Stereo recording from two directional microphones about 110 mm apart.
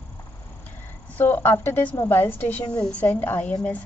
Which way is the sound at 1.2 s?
20° left (ahead or behind).